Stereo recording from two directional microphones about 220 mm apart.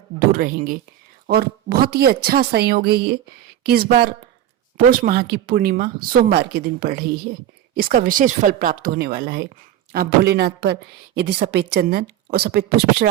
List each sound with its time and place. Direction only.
0.2 s a woman's voice: 40° right (ahead or behind)